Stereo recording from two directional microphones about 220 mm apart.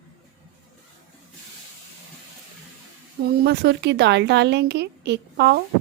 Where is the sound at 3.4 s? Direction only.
50° right (ahead or behind).